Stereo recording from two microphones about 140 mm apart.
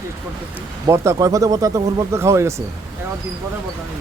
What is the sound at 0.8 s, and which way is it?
Speech, 20° right (ahead or behind).